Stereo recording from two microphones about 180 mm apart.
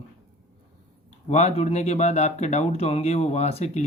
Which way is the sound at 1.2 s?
40° left (ahead or behind).